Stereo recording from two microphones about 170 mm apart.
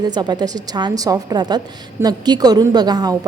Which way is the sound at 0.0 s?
25° right (ahead or behind).